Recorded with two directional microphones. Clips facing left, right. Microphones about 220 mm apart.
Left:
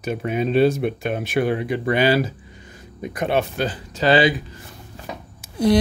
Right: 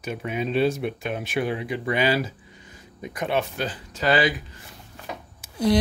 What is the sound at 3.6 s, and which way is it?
Speech, 30° left (ahead or behind).